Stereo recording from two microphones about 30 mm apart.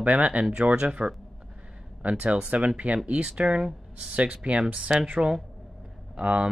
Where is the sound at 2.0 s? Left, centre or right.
Right.